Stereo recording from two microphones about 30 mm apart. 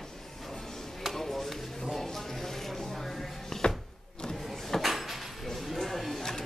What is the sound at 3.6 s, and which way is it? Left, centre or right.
Music, left.